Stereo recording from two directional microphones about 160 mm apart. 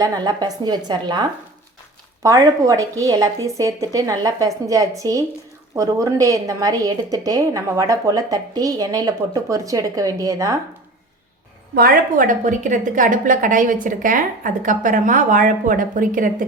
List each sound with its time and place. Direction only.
0.0 s a woman's voice: 25° right (ahead or behind)
11.7 s a woman's voice: 70° right (ahead or behind)